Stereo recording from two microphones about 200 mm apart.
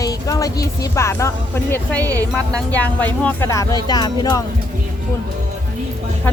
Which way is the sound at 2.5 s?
5° left (ahead or behind).